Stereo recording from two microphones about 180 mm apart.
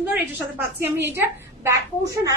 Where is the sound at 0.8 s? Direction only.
15° right (ahead or behind).